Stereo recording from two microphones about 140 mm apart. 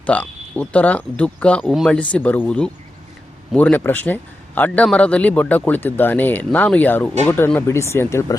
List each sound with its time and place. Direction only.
0.0 s speech: 10° left (ahead or behind)
1.6 s speech: centre (ahead or behind)
1.9 s speech: 10° left (ahead or behind)